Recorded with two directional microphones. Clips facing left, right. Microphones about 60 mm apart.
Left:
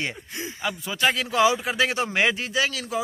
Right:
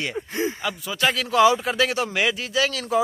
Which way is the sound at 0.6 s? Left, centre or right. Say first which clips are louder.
Left 5 dB; left.